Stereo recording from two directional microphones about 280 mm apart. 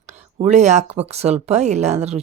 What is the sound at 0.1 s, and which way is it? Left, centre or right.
Speech, right.